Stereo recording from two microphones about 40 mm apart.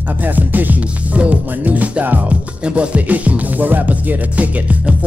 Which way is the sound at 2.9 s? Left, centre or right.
Right.